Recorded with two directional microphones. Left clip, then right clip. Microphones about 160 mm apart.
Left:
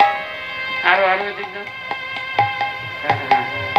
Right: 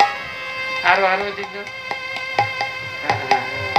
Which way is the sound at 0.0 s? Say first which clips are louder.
Left 2 dB; 45° right (ahead or behind).